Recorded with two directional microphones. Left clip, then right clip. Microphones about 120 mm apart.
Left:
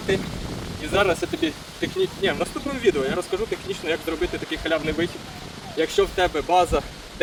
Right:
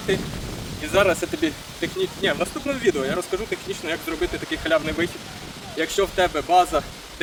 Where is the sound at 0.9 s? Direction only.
25° right (ahead or behind).